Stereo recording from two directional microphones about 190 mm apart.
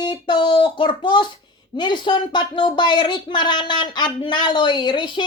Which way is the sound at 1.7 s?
25° left (ahead or behind).